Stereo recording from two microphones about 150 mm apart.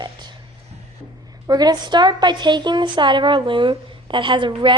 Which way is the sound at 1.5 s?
25° right (ahead or behind).